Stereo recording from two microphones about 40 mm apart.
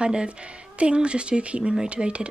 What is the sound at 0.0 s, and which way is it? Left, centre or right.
A woman's voice, right.